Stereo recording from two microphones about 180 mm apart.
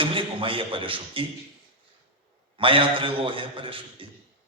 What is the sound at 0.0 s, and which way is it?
A man's voice, 30° right (ahead or behind).